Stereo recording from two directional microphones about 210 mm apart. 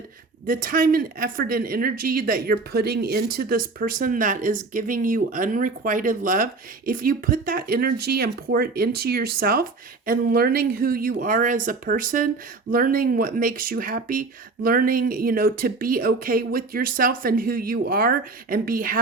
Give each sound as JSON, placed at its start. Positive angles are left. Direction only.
{"t": 0.4, "sound": "speech", "side_deg": -40}